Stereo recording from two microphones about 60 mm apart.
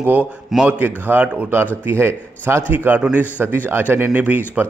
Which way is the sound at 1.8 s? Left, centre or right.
Right.